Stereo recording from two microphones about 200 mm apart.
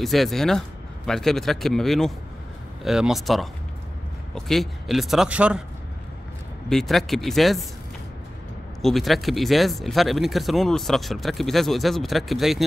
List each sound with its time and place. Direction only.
0.0 s speech: centre (ahead or behind)
6.7 s speech: centre (ahead or behind)
8.8 s speech: centre (ahead or behind)